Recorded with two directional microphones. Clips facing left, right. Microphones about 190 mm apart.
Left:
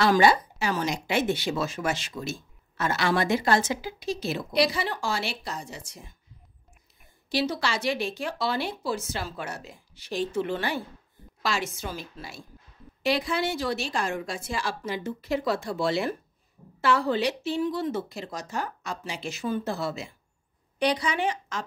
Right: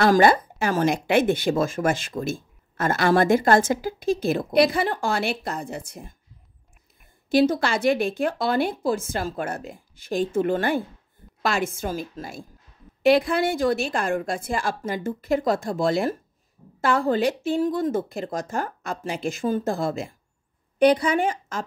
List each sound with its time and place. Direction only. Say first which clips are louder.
0.0 s speech: right 3 dB; 50° right (ahead or behind)
7.2 s speech: right 8 dB; 50° right (ahead or behind)